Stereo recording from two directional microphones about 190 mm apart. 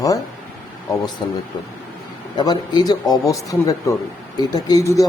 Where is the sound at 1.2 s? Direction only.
25° left (ahead or behind).